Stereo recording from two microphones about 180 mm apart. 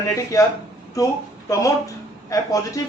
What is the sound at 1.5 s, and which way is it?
A woman's voice, 20° left (ahead or behind).